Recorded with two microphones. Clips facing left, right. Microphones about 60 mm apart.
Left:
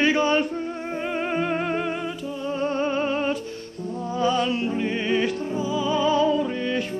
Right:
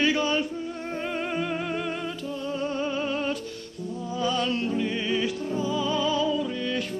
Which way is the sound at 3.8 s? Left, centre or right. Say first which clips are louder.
Left 4 dB; left.